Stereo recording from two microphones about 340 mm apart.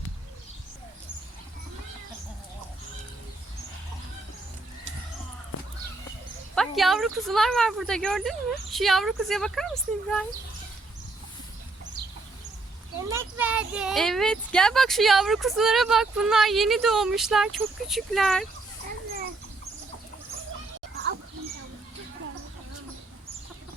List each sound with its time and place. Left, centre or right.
6.6 s speech: centre
13.1 s speech: centre